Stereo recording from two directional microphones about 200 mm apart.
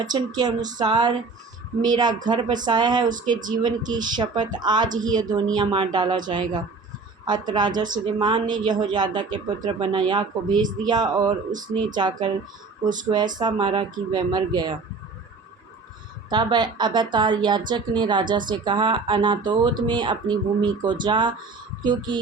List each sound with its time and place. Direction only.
0.0 s speech: 20° right (ahead or behind)
13.1 s speech: 20° right (ahead or behind)
16.3 s speech: 20° right (ahead or behind)